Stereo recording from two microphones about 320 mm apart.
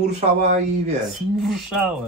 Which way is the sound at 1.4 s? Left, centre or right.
Centre.